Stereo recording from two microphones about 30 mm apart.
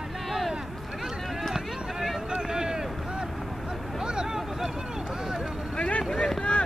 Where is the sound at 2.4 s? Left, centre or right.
Right.